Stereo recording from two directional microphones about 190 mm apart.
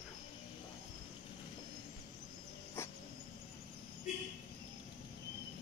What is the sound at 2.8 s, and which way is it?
Dog, 15° left (ahead or behind).